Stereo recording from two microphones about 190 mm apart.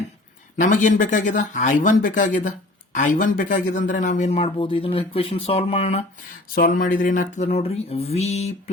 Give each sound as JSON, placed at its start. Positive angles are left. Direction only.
{"t": 0.6, "sound": "speech", "side_deg": 40}
{"t": 6.5, "sound": "speech", "side_deg": 45}
{"t": 7.3, "sound": "speech", "side_deg": 35}